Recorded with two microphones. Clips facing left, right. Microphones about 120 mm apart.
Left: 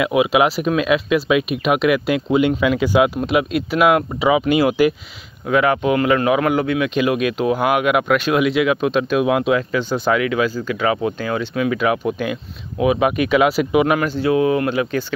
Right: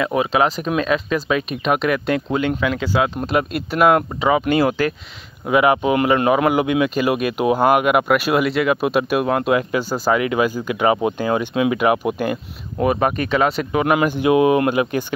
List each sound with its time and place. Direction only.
0.0 s speech: 10° left (ahead or behind)
3.3 s speech: centre (ahead or behind)
5.5 s speech: 10° right (ahead or behind)
12.7 s speech: 5° left (ahead or behind)
13.9 s speech: 15° right (ahead or behind)